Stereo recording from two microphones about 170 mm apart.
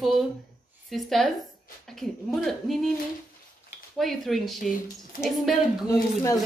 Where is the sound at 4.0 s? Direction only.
Centre (ahead or behind).